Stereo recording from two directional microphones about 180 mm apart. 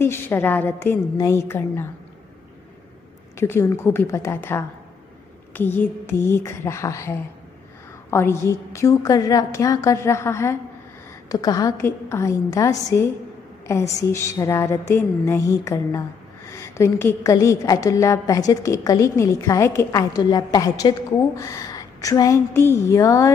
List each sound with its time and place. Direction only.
0.0 s a woman's voice: 15° left (ahead or behind)
3.3 s a woman's voice: 15° left (ahead or behind)